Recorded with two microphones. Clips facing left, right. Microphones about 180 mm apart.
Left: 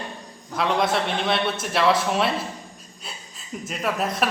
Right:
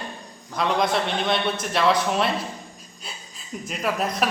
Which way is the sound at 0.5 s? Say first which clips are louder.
Even; 5° left (ahead or behind).